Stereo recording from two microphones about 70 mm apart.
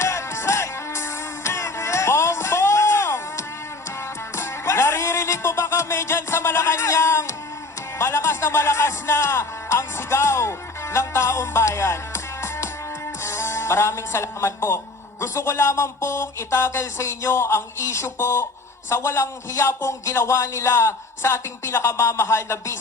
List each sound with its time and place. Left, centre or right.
0.0 s music: left
6.7 s a sound: left
7.9 s music: left
13.2 s speech: left